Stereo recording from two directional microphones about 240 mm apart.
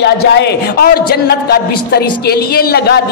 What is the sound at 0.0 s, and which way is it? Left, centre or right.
Speech, left.